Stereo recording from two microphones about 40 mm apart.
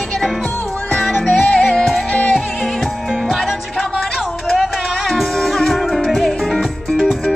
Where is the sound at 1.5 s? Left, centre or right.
Left.